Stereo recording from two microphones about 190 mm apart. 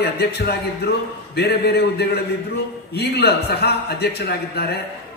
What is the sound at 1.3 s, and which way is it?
A man's voice, 60° left (ahead or behind).